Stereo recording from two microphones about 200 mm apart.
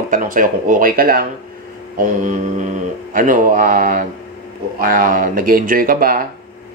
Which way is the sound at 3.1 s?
40° right (ahead or behind).